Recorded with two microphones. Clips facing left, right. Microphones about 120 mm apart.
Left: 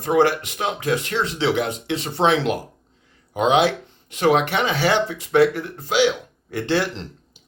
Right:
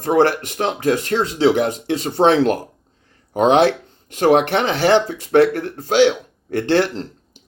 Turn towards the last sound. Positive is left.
turn(degrees=-55)  # may be behind; listen again after turning